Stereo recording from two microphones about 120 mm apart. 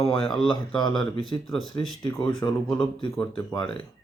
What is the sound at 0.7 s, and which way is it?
Speech, 40° left (ahead or behind).